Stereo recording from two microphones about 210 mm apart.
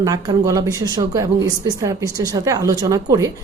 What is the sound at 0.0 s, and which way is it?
Speech, 15° right (ahead or behind).